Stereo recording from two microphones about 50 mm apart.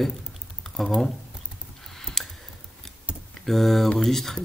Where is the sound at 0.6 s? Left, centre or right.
Centre.